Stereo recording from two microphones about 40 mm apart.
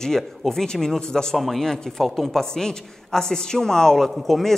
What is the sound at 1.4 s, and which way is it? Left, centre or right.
Speech, centre.